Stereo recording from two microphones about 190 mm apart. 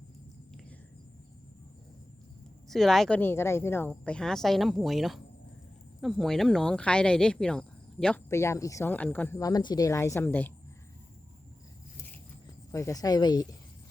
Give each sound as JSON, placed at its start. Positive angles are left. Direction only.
{"t": 2.6, "sound": "a woman's voice", "side_deg": 0}
{"t": 8.3, "sound": "speech", "side_deg": 15}
{"t": 12.7, "sound": "speech", "side_deg": 15}